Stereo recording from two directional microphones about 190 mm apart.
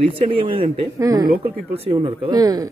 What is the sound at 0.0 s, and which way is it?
Speech, 30° right (ahead or behind).